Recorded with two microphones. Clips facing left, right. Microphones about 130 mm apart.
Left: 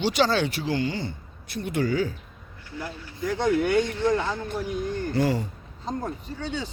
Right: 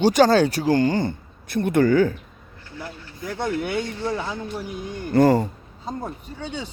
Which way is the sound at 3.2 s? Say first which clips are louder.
Left 3 dB; 5° right (ahead or behind).